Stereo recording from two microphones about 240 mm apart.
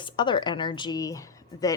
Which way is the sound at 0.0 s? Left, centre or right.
Centre.